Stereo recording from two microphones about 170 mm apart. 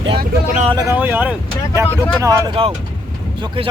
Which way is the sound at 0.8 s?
15° right (ahead or behind).